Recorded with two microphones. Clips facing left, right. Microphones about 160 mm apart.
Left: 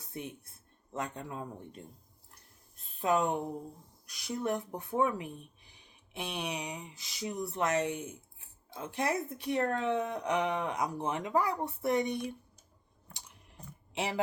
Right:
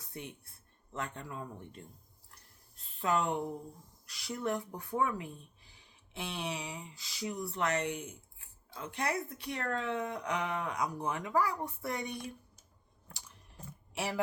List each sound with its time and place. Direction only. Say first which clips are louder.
0.9 s speech: left 3 dB; 20° left (ahead or behind)
3.0 s speech: left 2 dB; 20° left (ahead or behind)
13.9 s speech: left 2 dB; 20° left (ahead or behind)